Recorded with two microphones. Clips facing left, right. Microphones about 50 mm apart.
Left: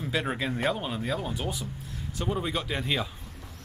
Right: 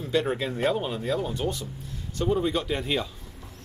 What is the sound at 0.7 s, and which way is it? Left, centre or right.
Speech, centre.